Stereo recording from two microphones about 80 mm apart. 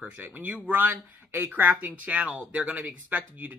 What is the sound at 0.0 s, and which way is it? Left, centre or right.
Speech, right.